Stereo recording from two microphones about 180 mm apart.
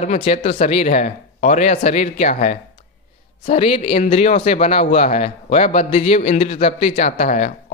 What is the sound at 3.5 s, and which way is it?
A man's voice, 30° left (ahead or behind).